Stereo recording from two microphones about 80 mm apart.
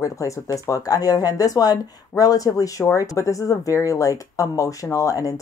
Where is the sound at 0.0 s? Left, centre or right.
Left.